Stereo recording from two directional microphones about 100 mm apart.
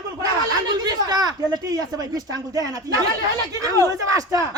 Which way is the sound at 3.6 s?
35° right (ahead or behind).